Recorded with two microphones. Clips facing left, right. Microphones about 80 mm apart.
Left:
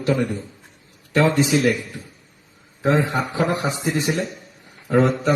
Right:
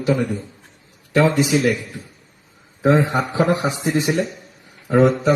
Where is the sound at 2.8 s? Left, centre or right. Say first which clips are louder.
Right 3 dB; centre.